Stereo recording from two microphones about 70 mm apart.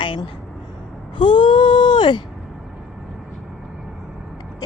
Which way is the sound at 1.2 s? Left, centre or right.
Left.